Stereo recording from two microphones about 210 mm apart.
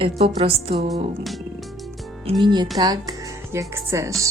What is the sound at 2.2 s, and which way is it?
Speech, 20° right (ahead or behind).